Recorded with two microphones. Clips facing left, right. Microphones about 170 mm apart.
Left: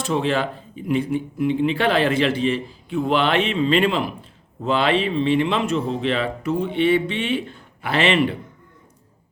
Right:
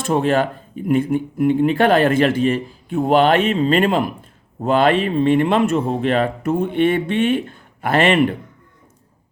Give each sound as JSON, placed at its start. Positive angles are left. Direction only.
{"t": 0.0, "sound": "speech", "side_deg": -50}